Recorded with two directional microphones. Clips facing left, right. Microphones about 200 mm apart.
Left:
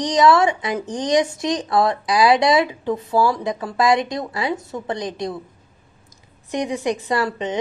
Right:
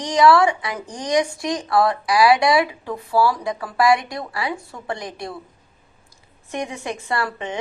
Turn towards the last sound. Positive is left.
turn(degrees=20)  # may be behind; listen again after turning